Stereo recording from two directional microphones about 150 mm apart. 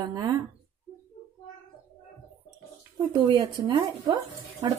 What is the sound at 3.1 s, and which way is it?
Speech, 30° right (ahead or behind).